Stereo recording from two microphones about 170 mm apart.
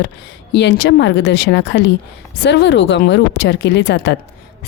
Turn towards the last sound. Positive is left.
turn(degrees=85)